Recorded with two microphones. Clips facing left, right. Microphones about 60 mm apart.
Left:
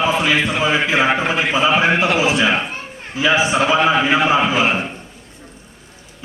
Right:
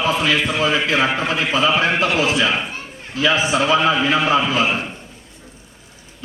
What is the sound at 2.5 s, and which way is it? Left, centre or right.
Speech, left.